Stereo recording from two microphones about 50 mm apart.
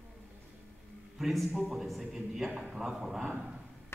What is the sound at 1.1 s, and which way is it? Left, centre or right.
A man's voice, centre.